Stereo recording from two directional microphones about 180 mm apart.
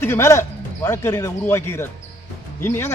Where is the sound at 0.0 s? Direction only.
15° left (ahead or behind).